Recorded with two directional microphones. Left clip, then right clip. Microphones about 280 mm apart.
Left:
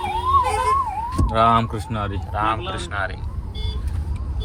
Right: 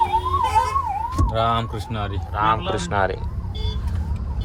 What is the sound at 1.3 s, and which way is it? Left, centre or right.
Speech, left.